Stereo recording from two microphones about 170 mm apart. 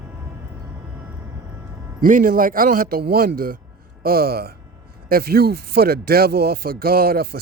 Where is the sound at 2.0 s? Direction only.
55° right (ahead or behind).